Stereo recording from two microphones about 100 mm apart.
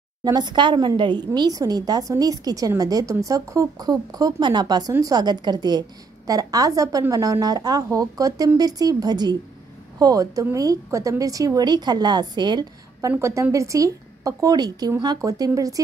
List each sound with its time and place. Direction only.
0.2 s a woman's voice: 45° right (ahead or behind)
13.2 s a woman's voice: 30° right (ahead or behind)